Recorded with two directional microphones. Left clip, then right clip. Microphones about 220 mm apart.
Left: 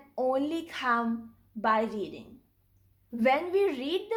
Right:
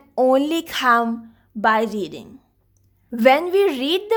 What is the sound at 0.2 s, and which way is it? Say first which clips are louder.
A woman's voice: right 12 dB; 50° right (ahead or behind).